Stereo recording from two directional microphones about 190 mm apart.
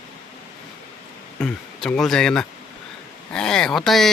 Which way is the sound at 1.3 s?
5° left (ahead or behind).